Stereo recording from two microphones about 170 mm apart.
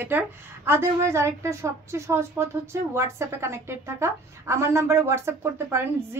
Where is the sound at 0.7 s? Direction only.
15° right (ahead or behind).